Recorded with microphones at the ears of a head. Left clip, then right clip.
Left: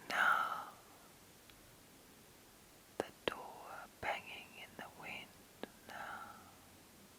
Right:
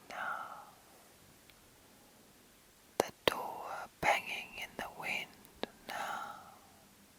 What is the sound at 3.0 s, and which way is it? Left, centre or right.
Whispering, right.